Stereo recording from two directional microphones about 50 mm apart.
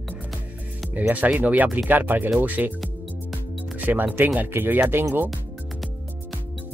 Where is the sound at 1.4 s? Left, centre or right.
Right.